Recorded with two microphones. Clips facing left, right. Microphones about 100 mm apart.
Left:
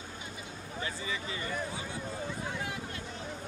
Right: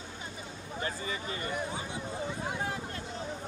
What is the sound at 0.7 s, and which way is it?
Speech, 40° right (ahead or behind).